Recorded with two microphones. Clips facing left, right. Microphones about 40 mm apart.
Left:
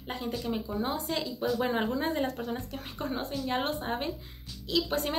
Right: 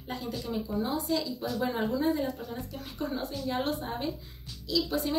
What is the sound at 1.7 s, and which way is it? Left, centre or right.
Speech, left.